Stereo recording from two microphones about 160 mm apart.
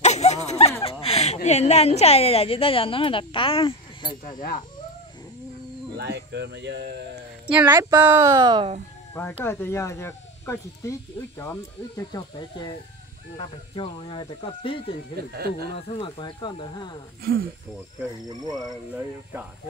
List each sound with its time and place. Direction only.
0.0 s a sound: 45° left (ahead or behind)
0.8 s speech: 40° left (ahead or behind)
4.4 s speech: 50° left (ahead or behind)
5.9 s speech: 90° right
7.4 s speech: 10° right (ahead or behind); by 8.6 s 25° right (ahead or behind)
9.4 s speech: 15° left (ahead or behind)
12.1 s speech: 25° left (ahead or behind)
15.1 s speech: 75° right (ahead or behind)
15.7 s speech: 30° left (ahead or behind)
17.2 s speech: 70° right (ahead or behind)